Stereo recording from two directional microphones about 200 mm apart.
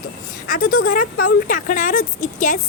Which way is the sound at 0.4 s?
45° left (ahead or behind).